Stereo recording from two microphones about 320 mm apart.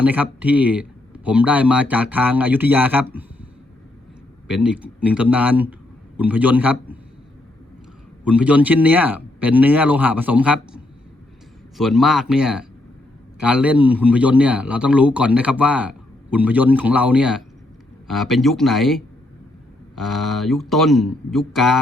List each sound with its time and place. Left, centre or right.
0.0 s a man's voice: centre
4.4 s a man's voice: centre
8.2 s a man's voice: centre
11.8 s a man's voice: centre